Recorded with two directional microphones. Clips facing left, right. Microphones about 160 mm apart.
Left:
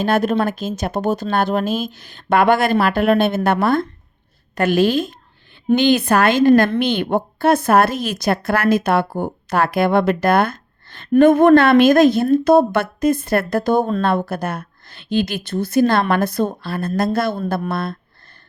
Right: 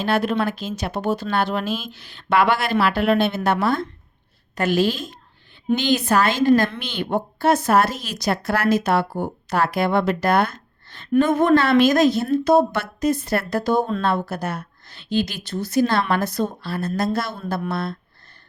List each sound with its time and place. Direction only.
0.0 s a woman's voice: 45° left (ahead or behind)